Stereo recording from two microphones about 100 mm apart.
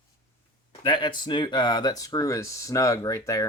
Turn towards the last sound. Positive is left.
turn(degrees=30)  # may be behind; listen again after turning